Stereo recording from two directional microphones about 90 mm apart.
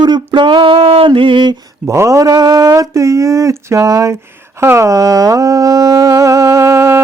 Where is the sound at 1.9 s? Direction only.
35° right (ahead or behind).